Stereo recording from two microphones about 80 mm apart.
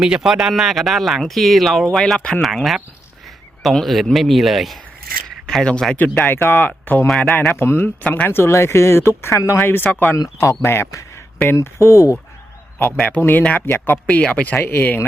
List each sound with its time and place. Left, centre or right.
0.0 s speech: centre; by 8.3 s left
8.3 s speech: left
9.6 s speech: left
10.4 s speech: left
12.8 s speech: centre
13.7 s speech: left
14.1 s speech: centre
14.5 s speech: left